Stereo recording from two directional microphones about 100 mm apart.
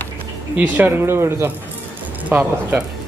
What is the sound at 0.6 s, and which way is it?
Speech, 20° right (ahead or behind).